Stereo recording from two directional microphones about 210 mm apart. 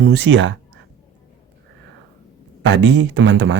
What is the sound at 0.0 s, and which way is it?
Speech, 55° right (ahead or behind).